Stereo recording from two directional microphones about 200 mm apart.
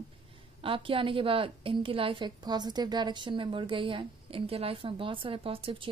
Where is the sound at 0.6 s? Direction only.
25° right (ahead or behind).